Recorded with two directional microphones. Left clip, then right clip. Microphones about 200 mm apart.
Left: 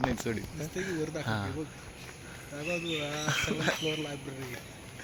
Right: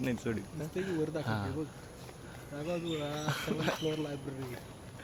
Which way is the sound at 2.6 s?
20° right (ahead or behind).